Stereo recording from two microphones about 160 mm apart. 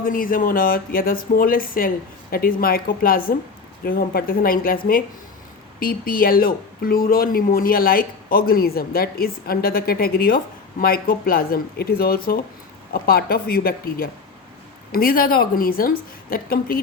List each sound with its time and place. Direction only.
0.0 s speech: 60° left (ahead or behind)
5.8 s speech: 65° left (ahead or behind)